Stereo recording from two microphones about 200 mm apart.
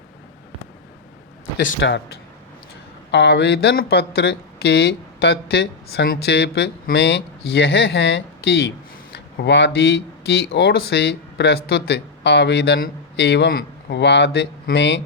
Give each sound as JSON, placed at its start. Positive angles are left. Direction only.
{"t": 1.8, "sound": "speech", "side_deg": 65}
{"t": 3.1, "sound": "speech", "side_deg": 60}